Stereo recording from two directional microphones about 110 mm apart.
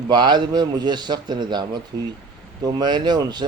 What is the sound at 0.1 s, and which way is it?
A man's voice, 45° right (ahead or behind).